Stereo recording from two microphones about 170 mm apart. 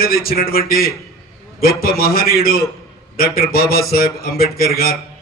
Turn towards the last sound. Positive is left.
turn(degrees=60)  # may be behind; listen again after turning